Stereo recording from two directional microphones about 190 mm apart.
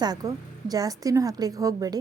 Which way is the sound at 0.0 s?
20° right (ahead or behind).